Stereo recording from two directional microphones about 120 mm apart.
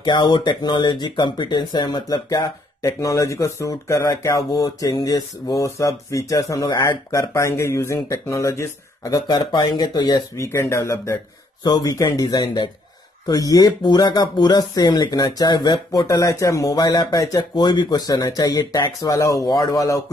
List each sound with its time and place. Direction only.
0.0 s speech: 40° left (ahead or behind)
9.1 s speech: 35° left (ahead or behind)
10.3 s speech: 25° left (ahead or behind)